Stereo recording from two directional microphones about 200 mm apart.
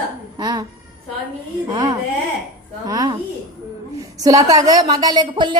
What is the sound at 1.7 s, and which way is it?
A woman's voice, 20° right (ahead or behind).